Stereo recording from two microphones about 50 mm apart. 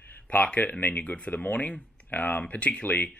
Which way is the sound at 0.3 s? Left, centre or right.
Left.